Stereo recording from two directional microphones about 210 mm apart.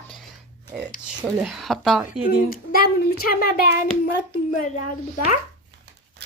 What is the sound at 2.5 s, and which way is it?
A woman's voice, 45° left (ahead or behind).